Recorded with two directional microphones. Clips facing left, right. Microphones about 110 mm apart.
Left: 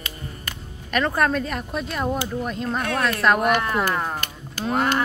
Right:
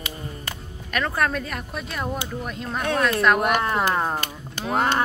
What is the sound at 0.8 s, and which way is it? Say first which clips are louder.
Speech: left 3 dB; centre (ahead or behind).